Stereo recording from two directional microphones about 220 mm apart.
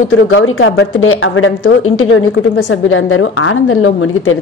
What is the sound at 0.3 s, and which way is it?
A woman's voice, 60° left (ahead or behind).